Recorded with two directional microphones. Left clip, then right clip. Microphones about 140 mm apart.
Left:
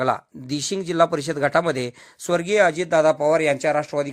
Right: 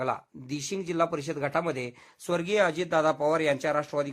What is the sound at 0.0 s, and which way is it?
Speech, 25° left (ahead or behind).